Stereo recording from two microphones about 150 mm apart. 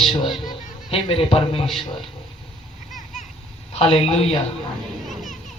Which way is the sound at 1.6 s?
Centre (ahead or behind).